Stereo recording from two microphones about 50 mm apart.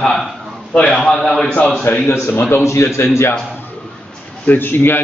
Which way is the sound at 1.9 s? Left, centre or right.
Left.